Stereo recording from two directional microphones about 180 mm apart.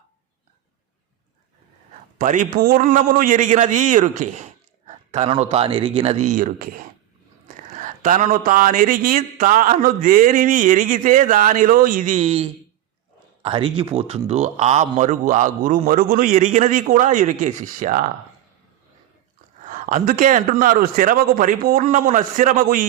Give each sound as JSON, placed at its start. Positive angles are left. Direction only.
{"t": 2.1, "sound": "a man's voice", "side_deg": -45}
{"t": 19.6, "sound": "speech", "side_deg": -45}